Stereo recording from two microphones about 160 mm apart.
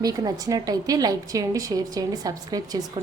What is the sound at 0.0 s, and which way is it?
A woman's voice, 25° right (ahead or behind).